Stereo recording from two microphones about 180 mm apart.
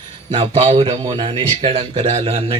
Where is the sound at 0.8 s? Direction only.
25° right (ahead or behind).